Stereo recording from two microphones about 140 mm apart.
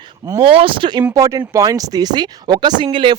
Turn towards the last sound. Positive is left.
turn(degrees=-35)  # may be behind; listen again after turning